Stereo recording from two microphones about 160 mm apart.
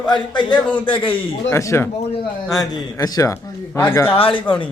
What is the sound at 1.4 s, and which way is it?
Speech, 15° left (ahead or behind).